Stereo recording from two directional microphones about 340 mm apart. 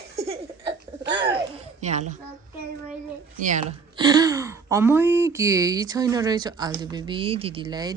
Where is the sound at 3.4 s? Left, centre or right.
Right.